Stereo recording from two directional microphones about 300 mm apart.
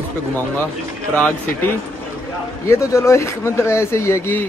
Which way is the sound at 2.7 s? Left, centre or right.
Centre.